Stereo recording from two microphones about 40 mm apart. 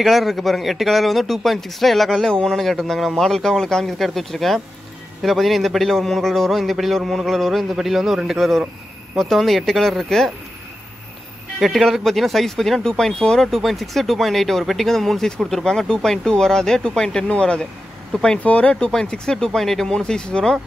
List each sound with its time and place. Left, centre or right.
0.0 s speech: centre
11.6 s speech: centre
13.6 s speech: centre; by 17.6 s left
18.4 s speech: left
18.7 s speech: centre
19.3 s speech: centre